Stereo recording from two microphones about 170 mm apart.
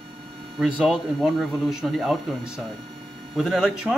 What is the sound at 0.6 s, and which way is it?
Speech, 5° right (ahead or behind).